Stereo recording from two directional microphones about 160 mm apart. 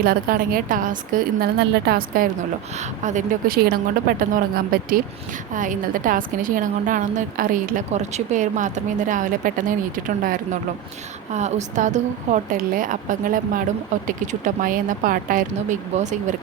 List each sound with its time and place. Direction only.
0.0 s a woman's voice: 65° right (ahead or behind)
2.7 s a woman's voice: 50° right (ahead or behind); by 5.0 s 65° right (ahead or behind)
5.5 s a woman's voice: 55° right (ahead or behind)
7.9 s speech: 45° right (ahead or behind)
11.3 s a woman's voice: 45° right (ahead or behind)
16.0 s speech: 45° right (ahead or behind)